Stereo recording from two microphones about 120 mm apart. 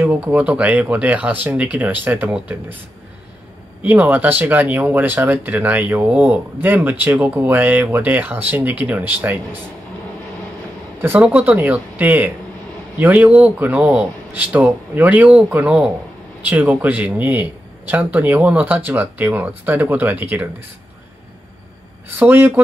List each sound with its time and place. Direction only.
0.0 s speech: 15° right (ahead or behind)
3.8 s speech: 15° right (ahead or behind)
11.0 s speech: 15° right (ahead or behind)
22.1 s speech: 15° right (ahead or behind)